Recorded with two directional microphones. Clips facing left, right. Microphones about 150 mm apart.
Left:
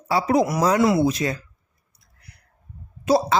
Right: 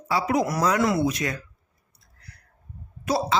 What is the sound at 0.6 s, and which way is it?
Speech, 25° left (ahead or behind).